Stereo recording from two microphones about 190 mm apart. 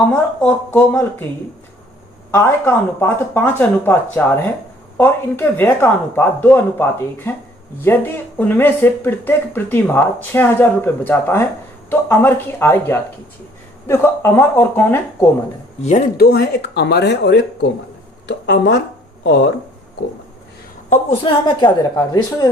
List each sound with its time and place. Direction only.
0.1 s speech: 10° left (ahead or behind)
2.3 s speech: 10° left (ahead or behind)
15.8 s speech: 40° left (ahead or behind); by 19.5 s 60° left (ahead or behind)
21.1 s speech: 25° left (ahead or behind)